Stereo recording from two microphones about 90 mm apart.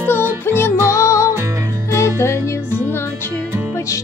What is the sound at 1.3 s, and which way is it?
Music, 35° right (ahead or behind).